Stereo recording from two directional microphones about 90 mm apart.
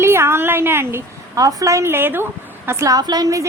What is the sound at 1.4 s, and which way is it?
A woman's voice, 40° right (ahead or behind).